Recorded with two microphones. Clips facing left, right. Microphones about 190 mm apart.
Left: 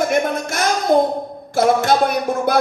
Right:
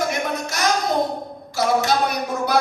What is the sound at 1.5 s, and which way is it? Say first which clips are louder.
Music: left 4 dB; 55° left (ahead or behind).